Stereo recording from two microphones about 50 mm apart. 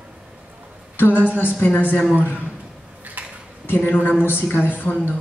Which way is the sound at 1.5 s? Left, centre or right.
Left.